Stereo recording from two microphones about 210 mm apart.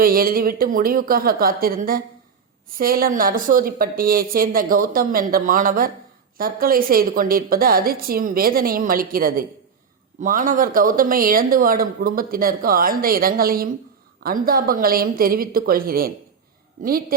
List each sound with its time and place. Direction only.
0.0 s speech: 45° right (ahead or behind)